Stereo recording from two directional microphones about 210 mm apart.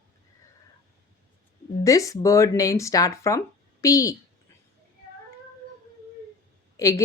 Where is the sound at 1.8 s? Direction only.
15° left (ahead or behind).